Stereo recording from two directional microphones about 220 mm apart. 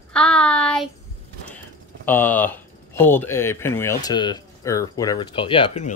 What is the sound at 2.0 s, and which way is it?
A man's voice, 10° left (ahead or behind).